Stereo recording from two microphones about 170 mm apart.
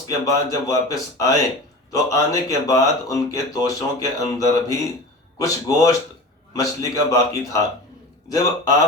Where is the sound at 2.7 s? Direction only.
20° left (ahead or behind).